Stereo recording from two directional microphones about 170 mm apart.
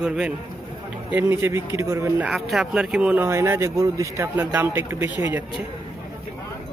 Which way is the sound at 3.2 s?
15° right (ahead or behind).